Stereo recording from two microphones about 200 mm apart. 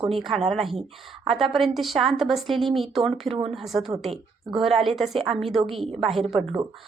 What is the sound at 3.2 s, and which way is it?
Speech, 30° right (ahead or behind).